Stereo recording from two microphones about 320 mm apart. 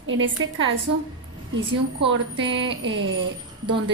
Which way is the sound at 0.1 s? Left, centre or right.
Right.